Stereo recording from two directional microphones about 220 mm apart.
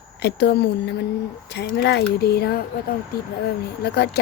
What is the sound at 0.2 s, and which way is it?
Speech, 50° left (ahead or behind).